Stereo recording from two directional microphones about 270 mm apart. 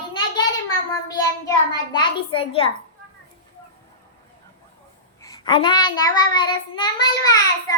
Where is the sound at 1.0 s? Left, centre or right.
Centre.